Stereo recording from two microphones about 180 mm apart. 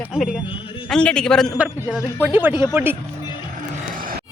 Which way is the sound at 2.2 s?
10° right (ahead or behind).